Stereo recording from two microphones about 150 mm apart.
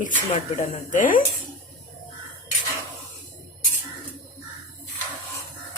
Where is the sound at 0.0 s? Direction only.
60° left (ahead or behind).